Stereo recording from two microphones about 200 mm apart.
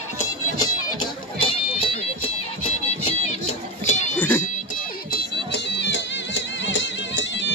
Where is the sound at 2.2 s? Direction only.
30° left (ahead or behind).